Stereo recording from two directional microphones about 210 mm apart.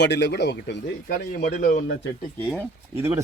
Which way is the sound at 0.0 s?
55° left (ahead or behind).